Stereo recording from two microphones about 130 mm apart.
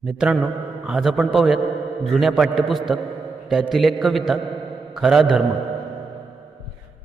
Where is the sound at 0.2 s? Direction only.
5° right (ahead or behind).